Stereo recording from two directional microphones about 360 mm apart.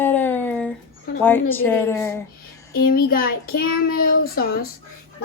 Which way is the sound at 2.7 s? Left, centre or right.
Left.